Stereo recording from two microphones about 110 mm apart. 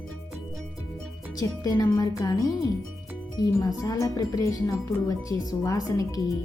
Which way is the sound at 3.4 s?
30° left (ahead or behind).